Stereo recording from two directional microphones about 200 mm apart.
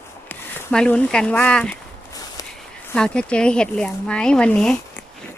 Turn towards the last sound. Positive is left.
turn(degrees=5)  # may be behind; listen again after turning